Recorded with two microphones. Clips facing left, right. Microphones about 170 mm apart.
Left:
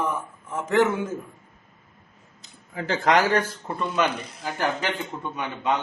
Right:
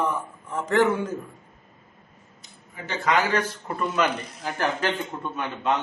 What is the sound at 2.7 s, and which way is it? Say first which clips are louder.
Speech: left 3 dB; 90° left.